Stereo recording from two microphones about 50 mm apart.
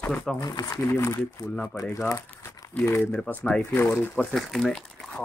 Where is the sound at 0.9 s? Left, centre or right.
Left.